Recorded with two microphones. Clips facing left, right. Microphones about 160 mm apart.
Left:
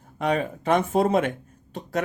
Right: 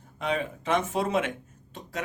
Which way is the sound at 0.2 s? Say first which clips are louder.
Left 5 dB; 50° left (ahead or behind).